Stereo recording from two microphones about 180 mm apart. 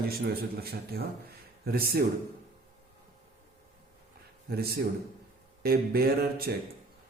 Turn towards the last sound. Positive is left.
turn(degrees=-55)  # may be behind; listen again after turning